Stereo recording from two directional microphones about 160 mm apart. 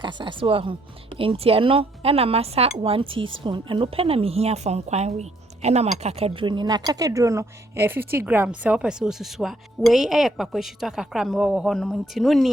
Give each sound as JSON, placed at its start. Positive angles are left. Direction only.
{"t": 0.0, "sound": "speech", "side_deg": -30}